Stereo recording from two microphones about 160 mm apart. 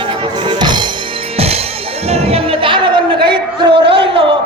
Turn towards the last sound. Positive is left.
turn(degrees=-35)  # may be behind; listen again after turning